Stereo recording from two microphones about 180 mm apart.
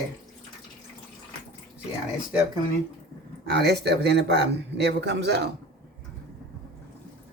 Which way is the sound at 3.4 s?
65° right (ahead or behind).